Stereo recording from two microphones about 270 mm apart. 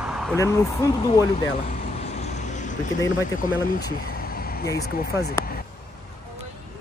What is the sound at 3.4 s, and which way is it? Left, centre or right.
Speech, left.